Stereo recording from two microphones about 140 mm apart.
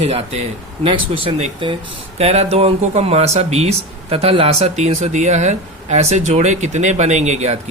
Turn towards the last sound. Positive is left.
turn(degrees=-50)  # may be behind; listen again after turning